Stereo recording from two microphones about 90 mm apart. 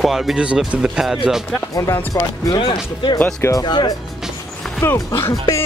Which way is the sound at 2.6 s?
65° left (ahead or behind).